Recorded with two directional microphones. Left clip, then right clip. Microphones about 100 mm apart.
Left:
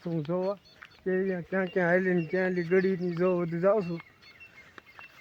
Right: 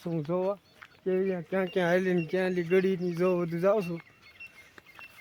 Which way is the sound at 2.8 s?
10° right (ahead or behind).